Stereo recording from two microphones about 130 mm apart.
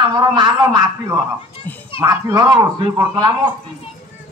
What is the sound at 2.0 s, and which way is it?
Speech, 30° right (ahead or behind).